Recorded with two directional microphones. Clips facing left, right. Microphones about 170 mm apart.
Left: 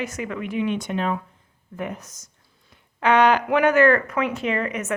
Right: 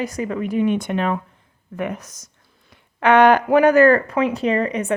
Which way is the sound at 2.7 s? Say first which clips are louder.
Right 4 dB; 60° right (ahead or behind).